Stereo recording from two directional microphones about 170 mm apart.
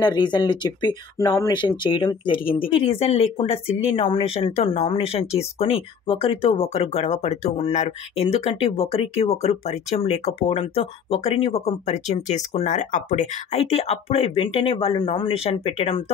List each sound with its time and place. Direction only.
0.0 s speech: 25° left (ahead or behind)